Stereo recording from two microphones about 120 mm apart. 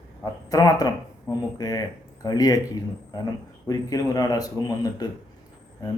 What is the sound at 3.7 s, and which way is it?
A man's voice, 30° left (ahead or behind).